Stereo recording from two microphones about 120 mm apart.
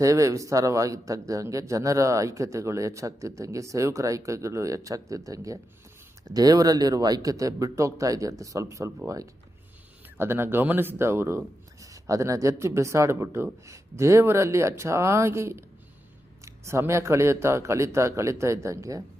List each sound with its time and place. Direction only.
0.0 s speech: 25° right (ahead or behind)